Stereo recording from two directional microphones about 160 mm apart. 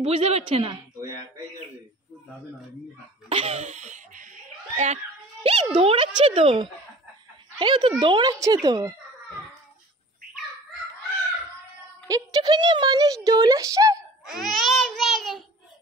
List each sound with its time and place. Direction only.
0.0 s a woman's voice: 40° right (ahead or behind)
3.3 s a sound: 40° right (ahead or behind)
7.5 s speech: 30° right (ahead or behind)
12.1 s speech: 25° right (ahead or behind)
14.2 s a child's voice: centre (ahead or behind)